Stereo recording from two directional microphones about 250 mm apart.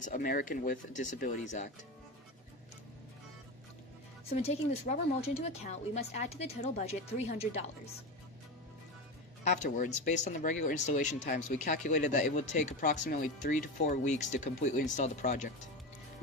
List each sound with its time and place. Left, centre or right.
0.0 s speech: left
4.3 s speech: left
9.4 s speech: left